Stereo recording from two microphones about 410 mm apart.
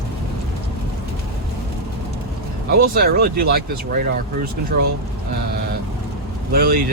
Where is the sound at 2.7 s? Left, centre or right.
Right.